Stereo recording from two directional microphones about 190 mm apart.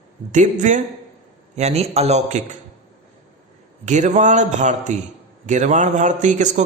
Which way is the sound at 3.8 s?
40° right (ahead or behind).